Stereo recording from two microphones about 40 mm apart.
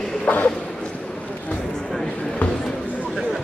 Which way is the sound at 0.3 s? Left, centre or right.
Left.